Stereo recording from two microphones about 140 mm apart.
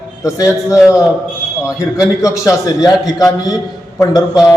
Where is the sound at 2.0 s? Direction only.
25° left (ahead or behind).